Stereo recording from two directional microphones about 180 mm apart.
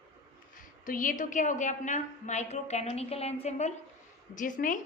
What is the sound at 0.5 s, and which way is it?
A woman's voice, 45° left (ahead or behind).